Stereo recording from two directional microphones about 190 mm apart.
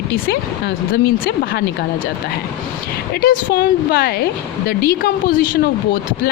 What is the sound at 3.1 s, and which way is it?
A woman's voice, 50° left (ahead or behind).